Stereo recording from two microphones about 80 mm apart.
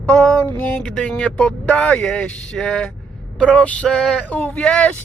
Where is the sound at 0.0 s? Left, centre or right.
Centre.